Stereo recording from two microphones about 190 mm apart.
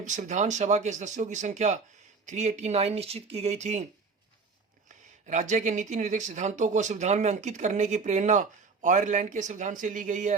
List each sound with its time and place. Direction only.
0.0 s speech: 40° right (ahead or behind)
5.2 s speech: 40° right (ahead or behind)